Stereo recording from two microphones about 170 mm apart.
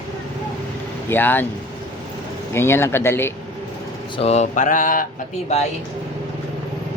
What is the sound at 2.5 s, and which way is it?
Speech, 15° left (ahead or behind).